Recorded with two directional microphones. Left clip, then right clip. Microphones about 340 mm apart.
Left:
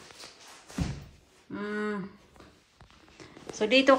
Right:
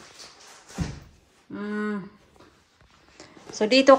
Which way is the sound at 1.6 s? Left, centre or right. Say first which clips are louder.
Right 2 dB; centre.